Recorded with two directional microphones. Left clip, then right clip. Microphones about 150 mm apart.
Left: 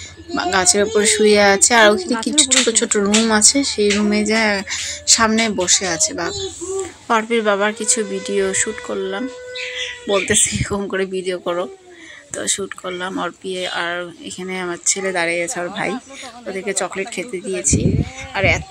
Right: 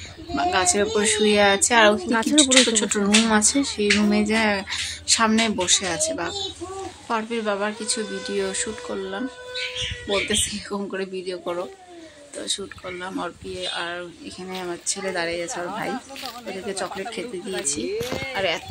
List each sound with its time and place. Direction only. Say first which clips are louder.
0.3 s speech: left 4 dB; 30° left (ahead or behind)
7.1 s speech: left 9 dB; 40° left (ahead or behind); by 9.2 s 20° left (ahead or behind)
10.0 s speech: left 7 dB; 30° left (ahead or behind)